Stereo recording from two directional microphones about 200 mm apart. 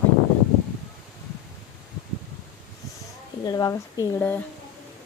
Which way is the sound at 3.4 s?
15° left (ahead or behind).